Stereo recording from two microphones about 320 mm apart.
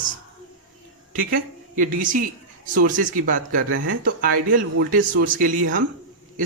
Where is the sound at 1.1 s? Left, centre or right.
Right.